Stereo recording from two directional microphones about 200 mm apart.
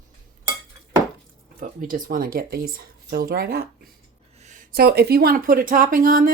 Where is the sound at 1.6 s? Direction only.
40° right (ahead or behind).